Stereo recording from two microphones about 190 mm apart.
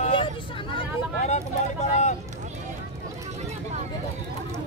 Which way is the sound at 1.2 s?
40° left (ahead or behind).